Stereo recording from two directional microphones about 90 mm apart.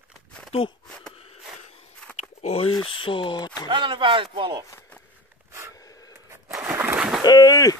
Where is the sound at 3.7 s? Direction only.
65° right (ahead or behind).